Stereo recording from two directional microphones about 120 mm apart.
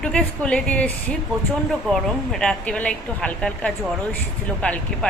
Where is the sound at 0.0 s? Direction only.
10° left (ahead or behind).